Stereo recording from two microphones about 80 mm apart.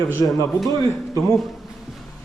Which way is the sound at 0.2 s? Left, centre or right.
Left.